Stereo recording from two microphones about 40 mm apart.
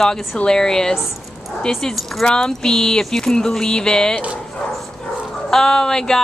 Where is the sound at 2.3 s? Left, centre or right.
Centre.